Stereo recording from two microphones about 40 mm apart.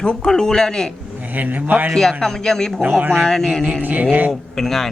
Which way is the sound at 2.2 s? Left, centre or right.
Centre.